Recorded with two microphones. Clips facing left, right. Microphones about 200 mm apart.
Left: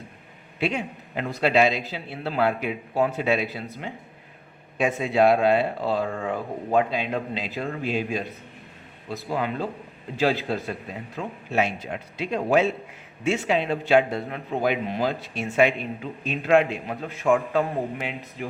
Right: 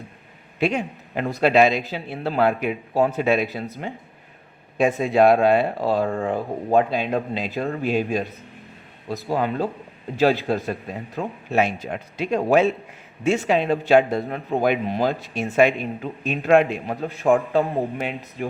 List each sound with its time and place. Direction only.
0.6 s a man's voice: 50° right (ahead or behind)
5.0 s speech: 50° right (ahead or behind)
9.3 s a man's voice: 40° right (ahead or behind)